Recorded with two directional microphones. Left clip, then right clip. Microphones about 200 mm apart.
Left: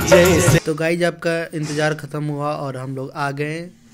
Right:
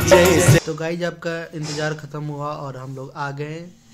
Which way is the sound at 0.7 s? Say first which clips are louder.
Left 6 dB; 20° left (ahead or behind).